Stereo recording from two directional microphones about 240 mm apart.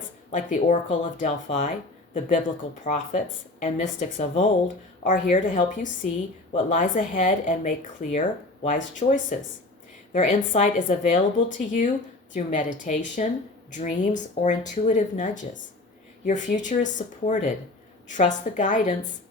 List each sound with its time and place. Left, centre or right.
0.3 s speech: left
2.8 s speech: left